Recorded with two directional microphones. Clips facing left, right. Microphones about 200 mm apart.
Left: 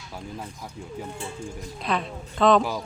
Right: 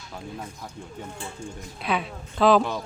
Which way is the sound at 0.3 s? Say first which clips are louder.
Even; 5° left (ahead or behind).